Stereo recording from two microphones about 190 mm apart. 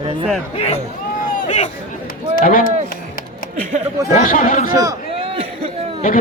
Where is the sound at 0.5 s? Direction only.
30° left (ahead or behind); by 2.7 s 45° left (ahead or behind).